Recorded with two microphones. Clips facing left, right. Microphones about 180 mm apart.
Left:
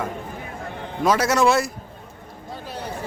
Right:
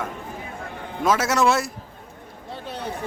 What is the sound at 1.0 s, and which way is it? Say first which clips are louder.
Speech: left 2 dB; centre (ahead or behind).